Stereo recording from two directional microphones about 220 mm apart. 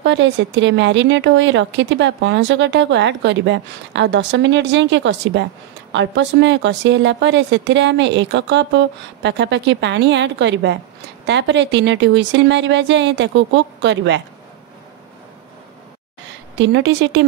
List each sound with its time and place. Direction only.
0.0 s a woman's voice: 55° right (ahead or behind)
16.5 s speech: 55° right (ahead or behind)